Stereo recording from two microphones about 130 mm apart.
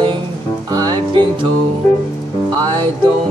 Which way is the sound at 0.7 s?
30° right (ahead or behind).